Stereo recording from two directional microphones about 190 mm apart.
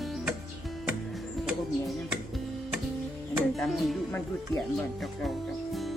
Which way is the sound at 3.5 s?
Centre (ahead or behind).